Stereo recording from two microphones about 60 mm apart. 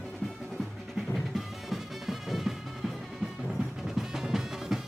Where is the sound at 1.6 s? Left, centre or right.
Centre.